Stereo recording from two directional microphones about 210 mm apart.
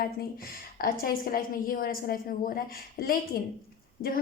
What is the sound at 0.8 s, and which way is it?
A woman's voice, 45° left (ahead or behind).